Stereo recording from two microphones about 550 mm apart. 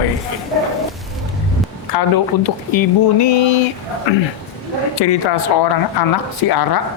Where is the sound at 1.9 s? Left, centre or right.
Left.